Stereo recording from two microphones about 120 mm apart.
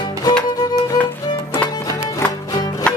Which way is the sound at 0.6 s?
35° left (ahead or behind).